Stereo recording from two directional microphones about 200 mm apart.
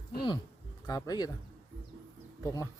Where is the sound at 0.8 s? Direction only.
20° left (ahead or behind).